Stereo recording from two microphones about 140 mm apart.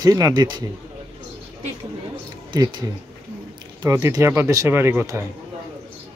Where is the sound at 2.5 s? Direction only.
30° right (ahead or behind).